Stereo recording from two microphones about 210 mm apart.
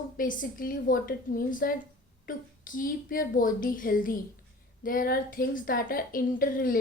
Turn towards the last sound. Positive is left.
turn(degrees=40)  # may be behind; listen again after turning